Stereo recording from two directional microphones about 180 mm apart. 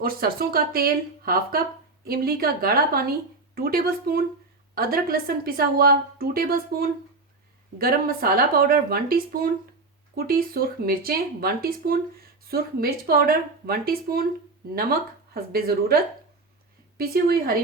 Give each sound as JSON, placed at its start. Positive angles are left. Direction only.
{"t": 0.0, "sound": "a woman's voice", "side_deg": -55}
{"t": 17.0, "sound": "a woman's voice", "side_deg": -55}